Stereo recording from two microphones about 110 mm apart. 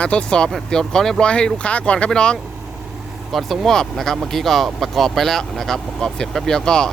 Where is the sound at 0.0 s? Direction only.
10° left (ahead or behind).